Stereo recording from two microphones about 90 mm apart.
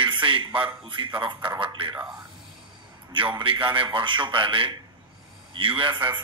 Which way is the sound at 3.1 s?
70° right (ahead or behind).